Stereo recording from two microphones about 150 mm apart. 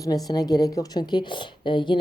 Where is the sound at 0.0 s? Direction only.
25° left (ahead or behind).